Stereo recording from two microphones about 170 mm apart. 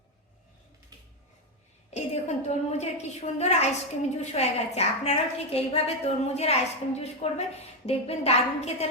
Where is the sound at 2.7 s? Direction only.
40° left (ahead or behind).